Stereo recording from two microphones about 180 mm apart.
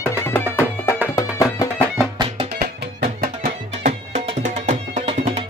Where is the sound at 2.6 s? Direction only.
55° right (ahead or behind).